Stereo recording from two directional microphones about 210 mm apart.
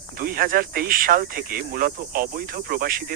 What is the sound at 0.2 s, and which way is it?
Speech, 45° right (ahead or behind).